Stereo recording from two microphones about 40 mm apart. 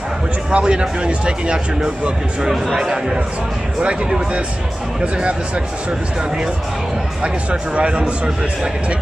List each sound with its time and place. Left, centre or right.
0.5 s speech: right
2.4 s a man's voice: centre; by 4.4 s right
7.7 s speech: right